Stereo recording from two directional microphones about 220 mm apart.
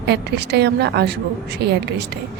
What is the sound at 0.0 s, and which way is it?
A woman's voice, 50° right (ahead or behind).